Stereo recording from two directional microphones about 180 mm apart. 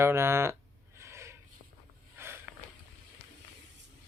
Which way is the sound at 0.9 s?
15° right (ahead or behind).